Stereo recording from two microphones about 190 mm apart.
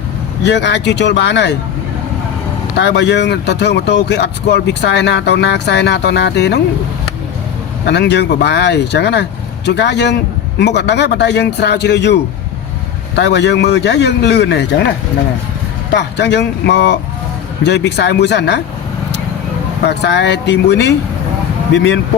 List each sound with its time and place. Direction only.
0.4 s speech: 65° left (ahead or behind)
2.7 s speech: 65° left (ahead or behind)
7.9 s speech: 65° left (ahead or behind)
15.9 s speech: 65° left (ahead or behind)
19.9 s speech: 65° left (ahead or behind)